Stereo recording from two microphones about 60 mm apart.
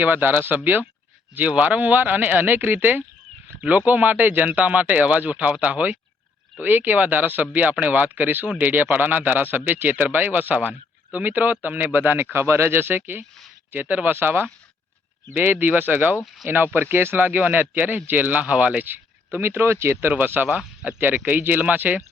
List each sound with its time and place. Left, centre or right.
0.0 s a man's voice: right